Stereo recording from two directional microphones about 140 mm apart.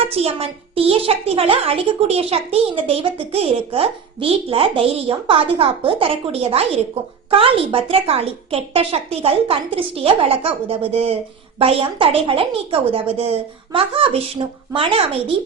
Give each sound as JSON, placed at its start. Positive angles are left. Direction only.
{"t": 0.1, "sound": "a woman's voice", "side_deg": -45}